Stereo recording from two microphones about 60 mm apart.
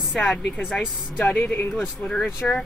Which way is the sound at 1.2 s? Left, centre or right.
Left.